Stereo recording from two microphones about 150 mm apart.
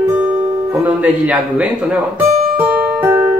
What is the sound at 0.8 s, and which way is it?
Speech, 10° right (ahead or behind).